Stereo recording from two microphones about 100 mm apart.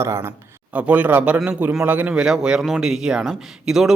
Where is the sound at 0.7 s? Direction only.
15° right (ahead or behind).